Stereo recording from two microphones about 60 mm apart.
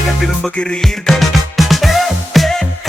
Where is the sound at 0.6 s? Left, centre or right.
Centre.